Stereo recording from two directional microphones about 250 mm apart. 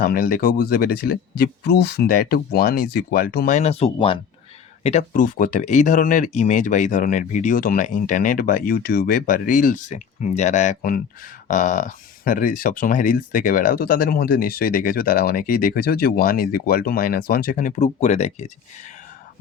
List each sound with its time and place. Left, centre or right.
0.0 s speech: left